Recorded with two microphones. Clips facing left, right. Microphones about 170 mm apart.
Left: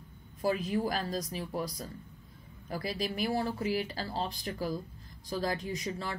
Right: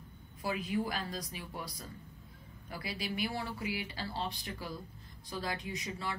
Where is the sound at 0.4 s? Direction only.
40° left (ahead or behind).